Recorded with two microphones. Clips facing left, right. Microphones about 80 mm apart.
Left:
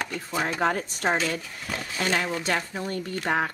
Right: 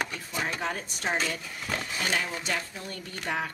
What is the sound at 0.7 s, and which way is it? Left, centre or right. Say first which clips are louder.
Speech: left 5 dB; left.